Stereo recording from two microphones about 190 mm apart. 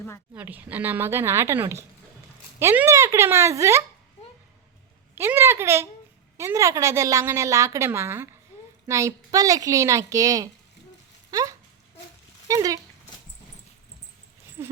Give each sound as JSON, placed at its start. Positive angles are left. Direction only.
{"t": 0.3, "sound": "a woman's voice", "side_deg": -10}
{"t": 5.1, "sound": "a woman's voice", "side_deg": -10}
{"t": 11.3, "sound": "a sound", "side_deg": -20}
{"t": 12.5, "sound": "speech", "side_deg": -20}
{"t": 14.6, "sound": "speech", "side_deg": -10}